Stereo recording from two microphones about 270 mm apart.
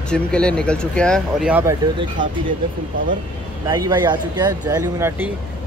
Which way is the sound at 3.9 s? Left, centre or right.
Centre.